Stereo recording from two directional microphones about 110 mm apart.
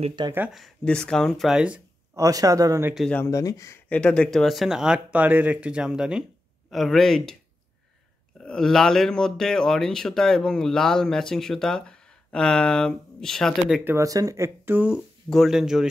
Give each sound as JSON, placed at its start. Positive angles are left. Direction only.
{"t": 0.5, "sound": "speech", "side_deg": 0}
{"t": 2.1, "sound": "speech", "side_deg": -30}
{"t": 3.3, "sound": "speech", "side_deg": 30}
{"t": 3.9, "sound": "speech", "side_deg": 10}
{"t": 8.4, "sound": "speech", "side_deg": 5}
{"t": 13.8, "sound": "speech", "side_deg": -30}
{"t": 15.2, "sound": "speech", "side_deg": 0}